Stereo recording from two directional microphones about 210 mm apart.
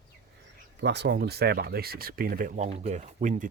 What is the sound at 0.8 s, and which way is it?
Speech, 55° right (ahead or behind).